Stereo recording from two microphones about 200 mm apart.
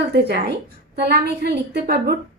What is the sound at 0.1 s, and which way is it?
A woman's voice, 55° right (ahead or behind).